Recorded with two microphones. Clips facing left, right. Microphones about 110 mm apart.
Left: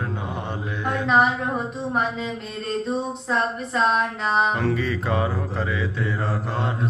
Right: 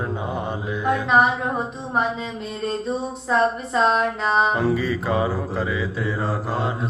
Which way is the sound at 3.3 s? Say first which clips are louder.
Right 5 dB; 5° right (ahead or behind).